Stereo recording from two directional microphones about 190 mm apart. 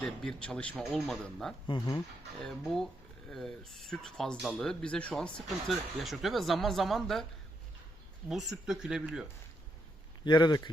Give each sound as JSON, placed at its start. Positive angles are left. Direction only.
{"t": 0.0, "sound": "speech", "side_deg": 5}
{"t": 1.6, "sound": "a man's voice", "side_deg": 25}
{"t": 2.4, "sound": "speech", "side_deg": 0}
{"t": 8.3, "sound": "speech", "side_deg": 0}
{"t": 10.2, "sound": "a man's voice", "side_deg": 25}